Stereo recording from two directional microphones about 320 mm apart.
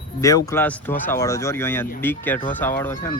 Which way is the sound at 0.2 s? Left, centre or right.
Centre.